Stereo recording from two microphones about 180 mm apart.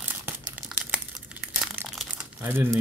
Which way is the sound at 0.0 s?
10° right (ahead or behind).